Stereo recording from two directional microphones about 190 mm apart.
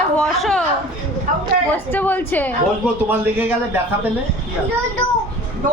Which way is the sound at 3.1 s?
10° right (ahead or behind).